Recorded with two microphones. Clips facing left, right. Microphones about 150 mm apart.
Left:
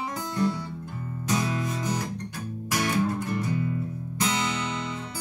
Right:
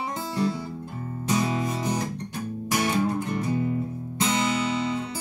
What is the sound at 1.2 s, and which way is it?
Music, 25° right (ahead or behind).